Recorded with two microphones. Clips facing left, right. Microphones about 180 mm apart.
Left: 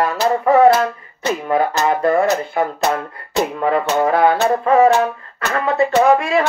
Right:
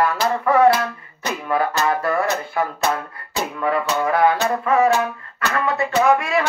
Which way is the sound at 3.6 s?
35° left (ahead or behind).